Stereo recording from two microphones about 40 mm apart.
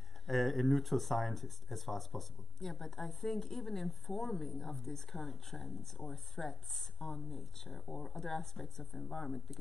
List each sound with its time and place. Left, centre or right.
0.3 s speech: centre